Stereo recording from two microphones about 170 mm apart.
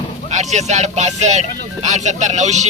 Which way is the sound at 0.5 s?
40° right (ahead or behind).